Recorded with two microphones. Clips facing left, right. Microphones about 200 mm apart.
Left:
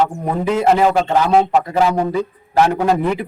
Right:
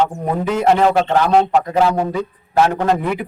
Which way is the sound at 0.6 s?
5° left (ahead or behind).